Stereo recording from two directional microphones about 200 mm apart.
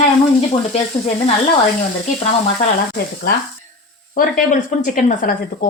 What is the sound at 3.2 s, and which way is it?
Speech, 45° left (ahead or behind).